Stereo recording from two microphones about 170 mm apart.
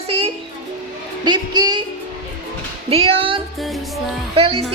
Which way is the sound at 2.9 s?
35° right (ahead or behind).